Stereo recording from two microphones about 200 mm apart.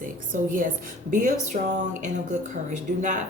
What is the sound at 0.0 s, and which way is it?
A woman's voice, 45° right (ahead or behind).